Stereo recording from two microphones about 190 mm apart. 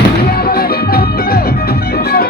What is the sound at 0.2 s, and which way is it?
Music, 55° left (ahead or behind).